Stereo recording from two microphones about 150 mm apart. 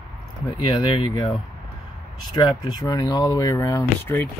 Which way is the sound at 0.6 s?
30° left (ahead or behind).